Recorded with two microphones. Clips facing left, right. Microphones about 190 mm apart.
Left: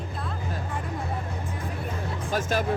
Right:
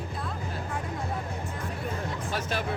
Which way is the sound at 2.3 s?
45° left (ahead or behind).